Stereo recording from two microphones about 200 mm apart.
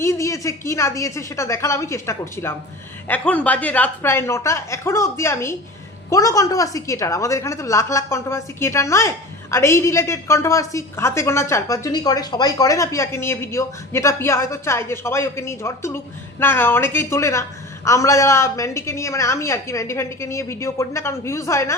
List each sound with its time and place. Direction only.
0.0 s a woman's voice: 15° left (ahead or behind)